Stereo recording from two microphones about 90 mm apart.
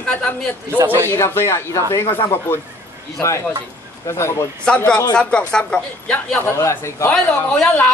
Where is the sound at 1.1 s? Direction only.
30° left (ahead or behind).